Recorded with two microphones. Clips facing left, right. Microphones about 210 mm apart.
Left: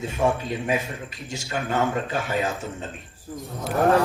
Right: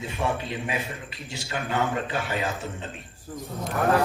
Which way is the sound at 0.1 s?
45° left (ahead or behind).